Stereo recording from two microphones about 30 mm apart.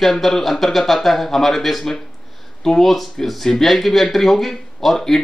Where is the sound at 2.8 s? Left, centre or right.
Centre.